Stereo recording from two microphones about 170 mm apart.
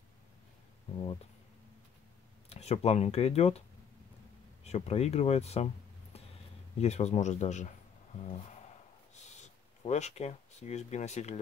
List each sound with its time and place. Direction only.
2.5 s speech: 40° left (ahead or behind)
4.6 s speech: 40° left (ahead or behind)
6.8 s speech: 40° left (ahead or behind)
9.1 s a sound: 45° left (ahead or behind)